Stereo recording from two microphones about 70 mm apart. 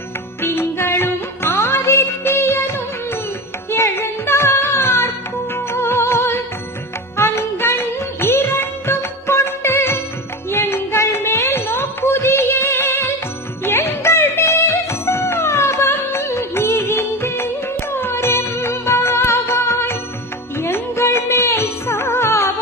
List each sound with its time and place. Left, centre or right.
0.4 s music: left
10.5 s a sound: left
13.7 s music: left
17.9 s music of bollywood: left
20.6 s music: left